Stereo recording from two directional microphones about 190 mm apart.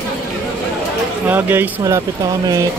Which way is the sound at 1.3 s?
10° right (ahead or behind).